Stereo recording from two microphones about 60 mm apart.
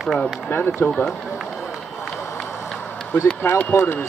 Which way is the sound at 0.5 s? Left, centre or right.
Left.